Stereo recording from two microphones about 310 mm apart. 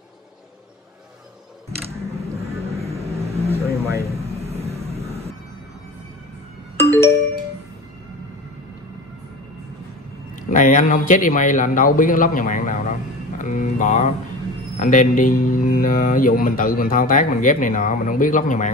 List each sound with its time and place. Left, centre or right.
1.9 s a sound: centre
3.5 s vehicle: centre
10.5 s speech: left